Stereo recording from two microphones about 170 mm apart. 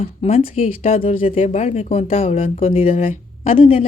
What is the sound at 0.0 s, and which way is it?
Speech, 40° left (ahead or behind).